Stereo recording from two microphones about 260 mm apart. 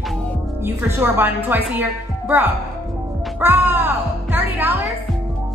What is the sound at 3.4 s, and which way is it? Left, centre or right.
A woman's voice, centre.